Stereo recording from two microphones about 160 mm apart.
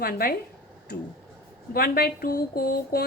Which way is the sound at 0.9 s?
90° left.